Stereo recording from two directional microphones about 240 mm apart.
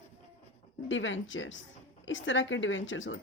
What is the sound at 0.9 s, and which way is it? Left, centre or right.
A woman's voice, left.